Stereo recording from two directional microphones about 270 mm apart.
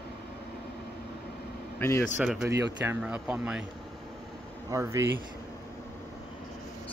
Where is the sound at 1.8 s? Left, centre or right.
Centre.